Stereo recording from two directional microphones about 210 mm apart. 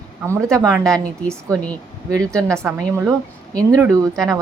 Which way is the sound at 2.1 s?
15° right (ahead or behind).